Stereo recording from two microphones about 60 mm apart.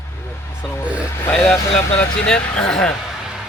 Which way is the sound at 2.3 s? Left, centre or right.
Centre.